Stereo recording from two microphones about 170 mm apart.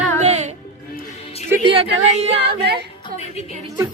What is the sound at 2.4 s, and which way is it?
Speech, 75° right (ahead or behind).